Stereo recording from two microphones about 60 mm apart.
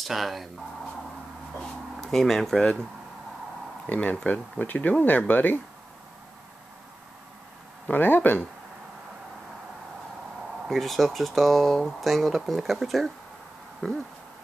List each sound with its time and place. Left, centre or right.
0.0 s speech: centre
1.6 s speech: centre
3.9 s speech: left
7.8 s speech: left
10.7 s speech: centre
13.8 s a sound: centre